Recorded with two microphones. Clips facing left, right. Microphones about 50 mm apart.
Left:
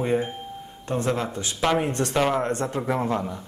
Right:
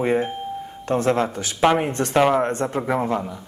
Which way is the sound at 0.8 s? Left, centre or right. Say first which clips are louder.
Right 5 dB; right.